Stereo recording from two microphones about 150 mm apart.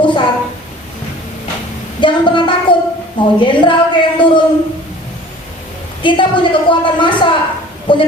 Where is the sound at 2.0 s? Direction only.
35° left (ahead or behind).